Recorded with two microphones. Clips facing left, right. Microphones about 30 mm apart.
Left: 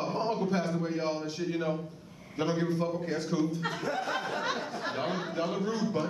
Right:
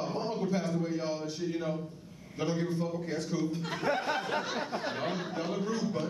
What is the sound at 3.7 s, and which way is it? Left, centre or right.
Speech, right.